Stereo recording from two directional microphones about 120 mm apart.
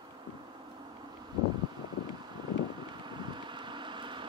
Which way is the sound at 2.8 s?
40° right (ahead or behind).